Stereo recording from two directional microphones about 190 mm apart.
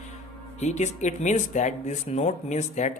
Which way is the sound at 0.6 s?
40° left (ahead or behind).